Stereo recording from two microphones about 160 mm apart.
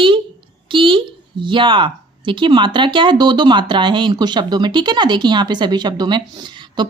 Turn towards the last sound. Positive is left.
turn(degrees=-30)  # may be behind; listen again after turning